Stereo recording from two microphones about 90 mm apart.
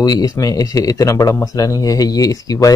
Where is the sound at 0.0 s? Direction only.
45° left (ahead or behind).